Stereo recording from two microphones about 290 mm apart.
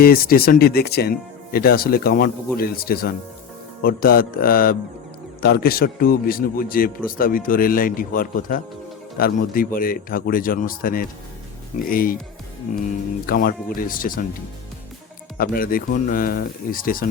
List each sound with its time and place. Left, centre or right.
0.0 s a man's voice: left
13.2 s a man's voice: left
15.4 s a man's voice: left